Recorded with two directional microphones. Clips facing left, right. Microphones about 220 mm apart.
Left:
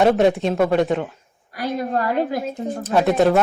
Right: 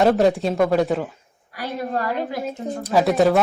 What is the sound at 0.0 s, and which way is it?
Speech, centre (ahead or behind).